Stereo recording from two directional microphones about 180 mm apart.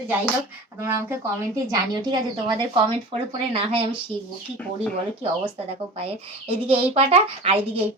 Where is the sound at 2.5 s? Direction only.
25° right (ahead or behind).